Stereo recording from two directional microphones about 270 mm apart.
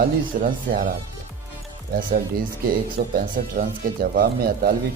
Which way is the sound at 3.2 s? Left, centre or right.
Right.